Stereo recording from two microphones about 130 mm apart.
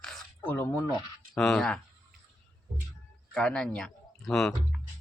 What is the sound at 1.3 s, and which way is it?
Speech, 5° left (ahead or behind).